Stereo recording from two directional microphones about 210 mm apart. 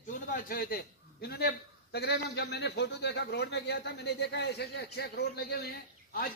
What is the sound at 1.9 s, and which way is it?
A man's voice, 50° left (ahead or behind).